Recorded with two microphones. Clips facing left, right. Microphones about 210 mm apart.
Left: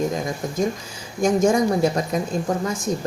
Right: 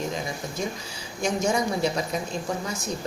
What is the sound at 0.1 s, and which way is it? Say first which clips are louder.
Speech: left 5 dB; 50° left (ahead or behind).